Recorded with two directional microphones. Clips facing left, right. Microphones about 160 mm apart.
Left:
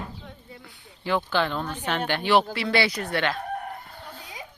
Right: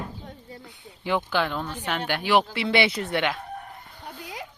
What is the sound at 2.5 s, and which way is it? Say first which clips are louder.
Speech: right 1 dB; 20° right (ahead or behind).